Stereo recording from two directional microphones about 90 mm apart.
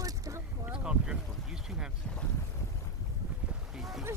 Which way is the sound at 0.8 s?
10° right (ahead or behind).